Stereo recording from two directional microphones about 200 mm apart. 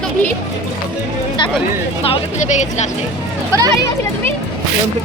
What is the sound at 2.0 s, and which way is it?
Speech, 30° left (ahead or behind).